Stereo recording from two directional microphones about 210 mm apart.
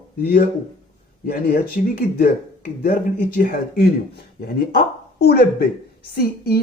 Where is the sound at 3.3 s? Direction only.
45° left (ahead or behind).